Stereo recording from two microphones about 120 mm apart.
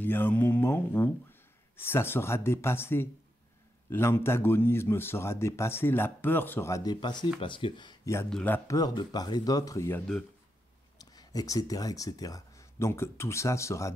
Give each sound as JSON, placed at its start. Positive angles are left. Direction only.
{"t": 0.0, "sound": "music", "side_deg": 15}
{"t": 1.8, "sound": "a man's voice", "side_deg": 20}
{"t": 8.3, "sound": "speech", "side_deg": 5}
{"t": 8.6, "sound": "speech", "side_deg": 30}